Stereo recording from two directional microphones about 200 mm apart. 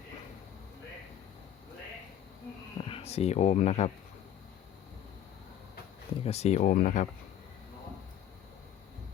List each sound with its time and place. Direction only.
2.7 s speech: 25° left (ahead or behind)
6.2 s speech: 30° left (ahead or behind)